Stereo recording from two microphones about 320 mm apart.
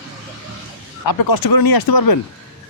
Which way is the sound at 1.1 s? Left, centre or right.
Left.